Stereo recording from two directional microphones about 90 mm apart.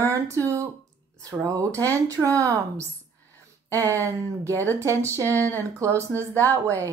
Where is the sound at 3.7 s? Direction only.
35° right (ahead or behind).